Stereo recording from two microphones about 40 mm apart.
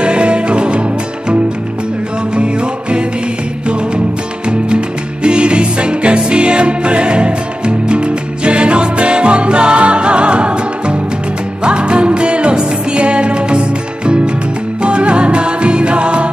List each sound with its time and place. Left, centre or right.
0.0 s music: right
2.3 s music: right
4.5 s music: right